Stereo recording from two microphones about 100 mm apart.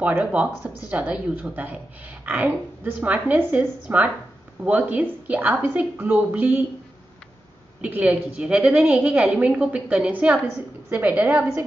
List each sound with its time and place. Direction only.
0.0 s a woman's voice: 15° right (ahead or behind)
7.8 s a woman's voice: 15° right (ahead or behind)